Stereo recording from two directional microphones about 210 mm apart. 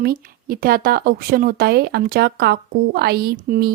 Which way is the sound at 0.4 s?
45° right (ahead or behind).